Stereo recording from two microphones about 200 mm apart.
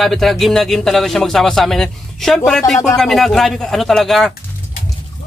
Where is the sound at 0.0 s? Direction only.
Centre (ahead or behind).